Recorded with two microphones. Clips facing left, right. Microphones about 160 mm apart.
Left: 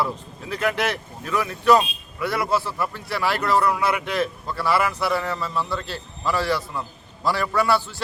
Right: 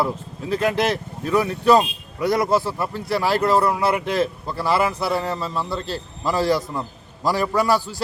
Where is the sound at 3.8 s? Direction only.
35° right (ahead or behind).